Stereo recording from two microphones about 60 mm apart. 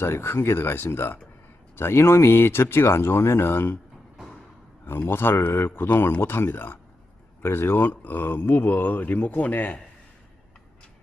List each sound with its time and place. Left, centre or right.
0.0 s speech: left
4.9 s speech: left